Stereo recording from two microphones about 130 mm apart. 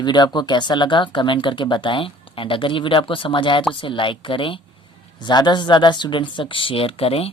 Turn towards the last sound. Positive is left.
turn(degrees=45)  # may be behind; listen again after turning